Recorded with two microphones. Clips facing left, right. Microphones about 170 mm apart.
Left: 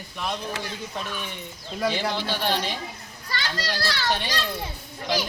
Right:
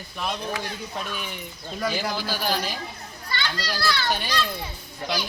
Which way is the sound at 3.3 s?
40° left (ahead or behind).